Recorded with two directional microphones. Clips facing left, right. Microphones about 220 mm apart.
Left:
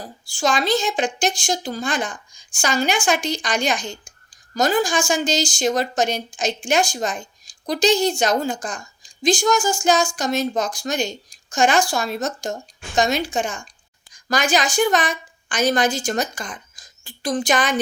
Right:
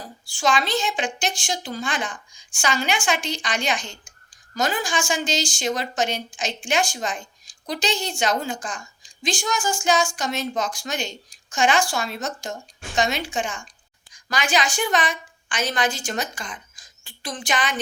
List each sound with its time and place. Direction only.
0.3 s a woman's voice: 40° left (ahead or behind)